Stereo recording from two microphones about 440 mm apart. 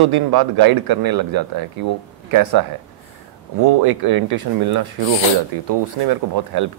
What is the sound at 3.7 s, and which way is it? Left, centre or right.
Speech, right.